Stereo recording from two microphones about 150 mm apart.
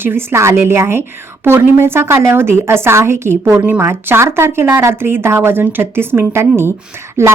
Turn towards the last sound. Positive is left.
turn(degrees=-20)  # may be behind; listen again after turning